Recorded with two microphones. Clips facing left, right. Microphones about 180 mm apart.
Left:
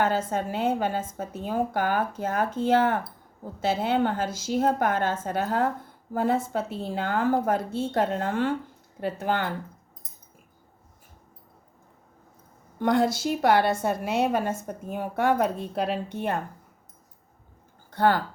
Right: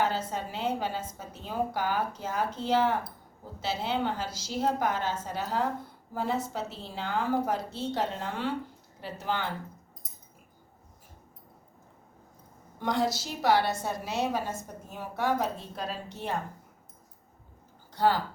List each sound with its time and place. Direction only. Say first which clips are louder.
0.0 s a woman's voice: left 5 dB; 50° left (ahead or behind)
12.8 s a woman's voice: left 6 dB; 55° left (ahead or behind)
17.9 s speech: left 3 dB; 55° left (ahead or behind)